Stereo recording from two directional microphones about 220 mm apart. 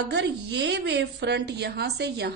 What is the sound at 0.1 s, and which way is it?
A woman's voice, 50° right (ahead or behind).